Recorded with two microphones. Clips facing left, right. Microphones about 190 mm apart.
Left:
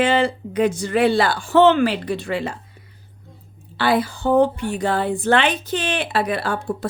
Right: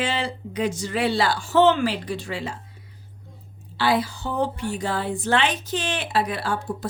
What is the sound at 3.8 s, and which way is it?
A woman's voice, 55° left (ahead or behind).